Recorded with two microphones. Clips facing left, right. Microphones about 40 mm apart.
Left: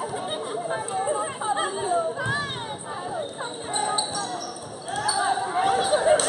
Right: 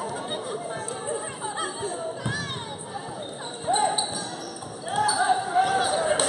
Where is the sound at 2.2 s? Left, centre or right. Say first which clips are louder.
Left 4 dB; left.